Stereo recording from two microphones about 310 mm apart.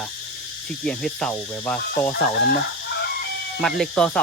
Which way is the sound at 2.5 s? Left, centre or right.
Left.